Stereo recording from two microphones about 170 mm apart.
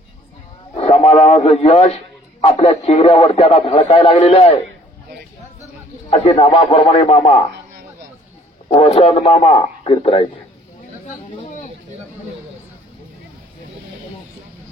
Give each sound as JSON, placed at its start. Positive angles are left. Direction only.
{"t": 0.7, "sound": "speech", "side_deg": 35}
{"t": 6.0, "sound": "speech", "side_deg": 40}
{"t": 8.6, "sound": "a man's voice", "side_deg": 40}
{"t": 11.1, "sound": "speech", "side_deg": 50}